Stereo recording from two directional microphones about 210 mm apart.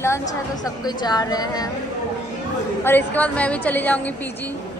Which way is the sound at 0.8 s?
20° left (ahead or behind).